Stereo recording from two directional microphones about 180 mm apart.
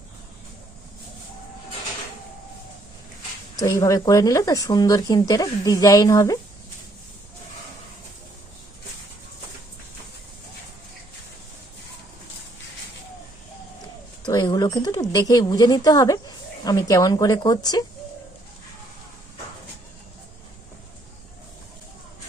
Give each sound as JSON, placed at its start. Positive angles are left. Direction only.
{"t": 3.6, "sound": "speech", "side_deg": 15}
{"t": 14.3, "sound": "speech", "side_deg": 20}